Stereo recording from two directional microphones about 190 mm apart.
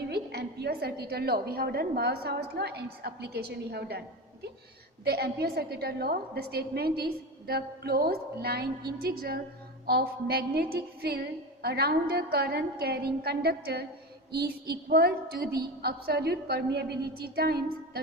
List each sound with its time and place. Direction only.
0.1 s a woman's voice: 60° right (ahead or behind)
5.0 s a woman's voice: 55° right (ahead or behind)